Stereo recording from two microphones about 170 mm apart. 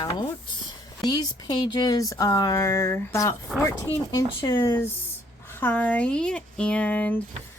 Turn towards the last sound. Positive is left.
turn(degrees=10)  # may be behind; listen again after turning